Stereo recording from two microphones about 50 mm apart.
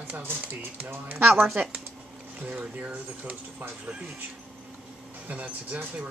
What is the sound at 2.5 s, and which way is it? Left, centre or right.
Speech, right.